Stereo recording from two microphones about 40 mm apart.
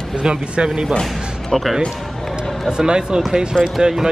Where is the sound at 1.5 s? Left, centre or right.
Centre.